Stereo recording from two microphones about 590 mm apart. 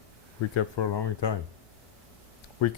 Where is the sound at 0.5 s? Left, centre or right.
Left.